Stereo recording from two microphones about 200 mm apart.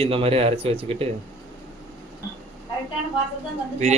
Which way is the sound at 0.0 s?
30° right (ahead or behind).